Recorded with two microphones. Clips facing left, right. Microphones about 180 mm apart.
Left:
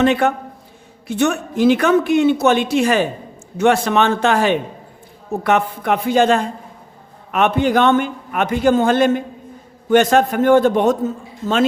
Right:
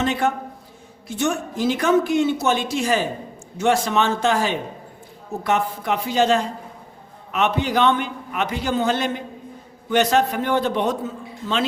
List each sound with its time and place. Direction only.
0.0 s a man's voice: 65° left (ahead or behind); by 11.6 s 45° left (ahead or behind)